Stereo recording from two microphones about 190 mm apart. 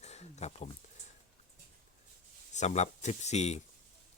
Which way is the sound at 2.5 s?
40° left (ahead or behind).